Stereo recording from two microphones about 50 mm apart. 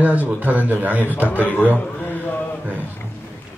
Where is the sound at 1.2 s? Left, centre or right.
Left.